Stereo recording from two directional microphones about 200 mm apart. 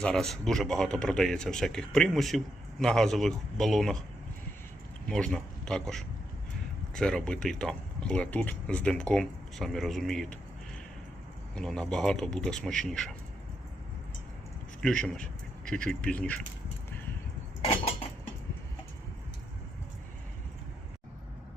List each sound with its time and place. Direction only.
0.0 s a man's voice: 5° left (ahead or behind)
5.0 s a man's voice: 5° left (ahead or behind)
11.5 s a man's voice: 5° left (ahead or behind)
14.8 s speech: 5° left (ahead or behind)
17.6 s cutlery: 30° left (ahead or behind)